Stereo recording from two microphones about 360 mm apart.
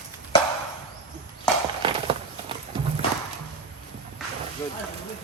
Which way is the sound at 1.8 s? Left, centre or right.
Centre.